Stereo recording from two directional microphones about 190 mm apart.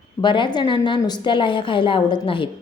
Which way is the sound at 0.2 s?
25° left (ahead or behind).